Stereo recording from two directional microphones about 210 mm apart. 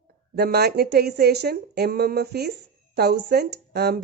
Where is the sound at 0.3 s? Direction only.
50° right (ahead or behind).